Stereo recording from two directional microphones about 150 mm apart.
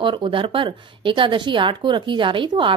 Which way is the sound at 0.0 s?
35° right (ahead or behind).